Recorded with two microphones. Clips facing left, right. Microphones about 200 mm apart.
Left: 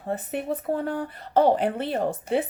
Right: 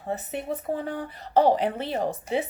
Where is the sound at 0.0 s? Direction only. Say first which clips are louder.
Left 2 dB; 55° left (ahead or behind).